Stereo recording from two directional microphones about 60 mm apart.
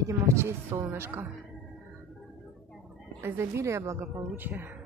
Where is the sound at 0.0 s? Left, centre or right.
Right.